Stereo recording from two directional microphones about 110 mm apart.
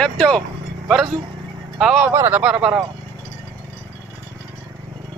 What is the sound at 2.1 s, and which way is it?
Speech, 20° right (ahead or behind).